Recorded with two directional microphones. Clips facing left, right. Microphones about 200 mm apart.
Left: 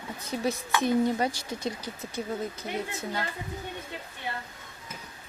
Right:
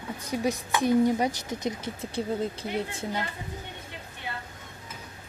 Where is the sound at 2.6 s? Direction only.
30° right (ahead or behind).